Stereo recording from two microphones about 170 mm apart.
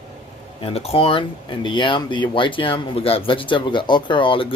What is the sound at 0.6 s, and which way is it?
Speech, 35° left (ahead or behind).